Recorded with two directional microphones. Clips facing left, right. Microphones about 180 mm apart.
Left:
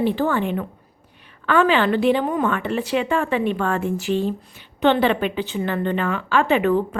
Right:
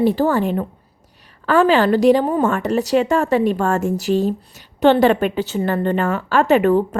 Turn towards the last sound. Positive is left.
turn(degrees=-45)  # may be behind; listen again after turning